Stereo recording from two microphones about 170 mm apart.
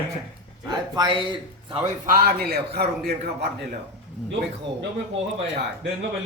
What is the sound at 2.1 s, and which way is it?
Speech, 60° right (ahead or behind).